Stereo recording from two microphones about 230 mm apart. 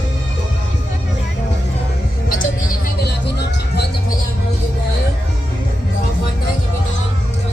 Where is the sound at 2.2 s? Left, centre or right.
Left.